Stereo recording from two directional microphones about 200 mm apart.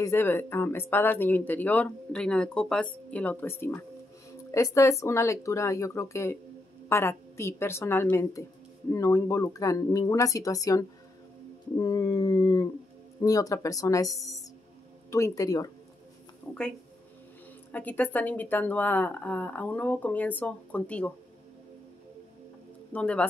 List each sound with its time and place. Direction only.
0.0 s speech: 10° left (ahead or behind)
11.7 s a sound: 20° left (ahead or behind)
13.2 s speech: 15° left (ahead or behind)
16.5 s speech: 5° left (ahead or behind)
17.6 s speech: 10° left (ahead or behind)
22.9 s speech: 5° left (ahead or behind)